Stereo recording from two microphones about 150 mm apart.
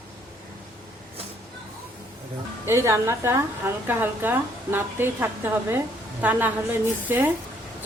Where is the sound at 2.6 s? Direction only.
20° right (ahead or behind).